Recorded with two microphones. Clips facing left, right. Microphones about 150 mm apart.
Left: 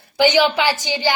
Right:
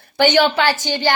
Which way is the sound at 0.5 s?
15° left (ahead or behind).